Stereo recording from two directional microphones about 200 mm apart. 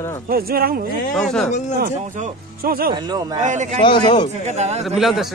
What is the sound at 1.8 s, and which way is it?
Speech, 40° right (ahead or behind).